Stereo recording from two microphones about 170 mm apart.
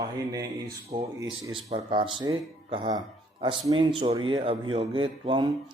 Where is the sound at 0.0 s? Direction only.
20° right (ahead or behind).